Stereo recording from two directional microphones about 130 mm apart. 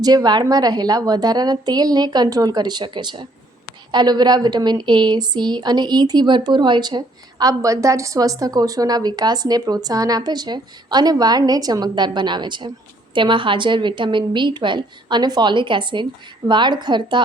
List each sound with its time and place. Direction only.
0.0 s speech: 30° right (ahead or behind)